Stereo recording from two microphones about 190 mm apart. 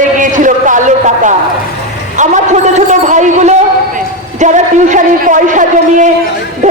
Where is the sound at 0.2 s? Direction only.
40° right (ahead or behind).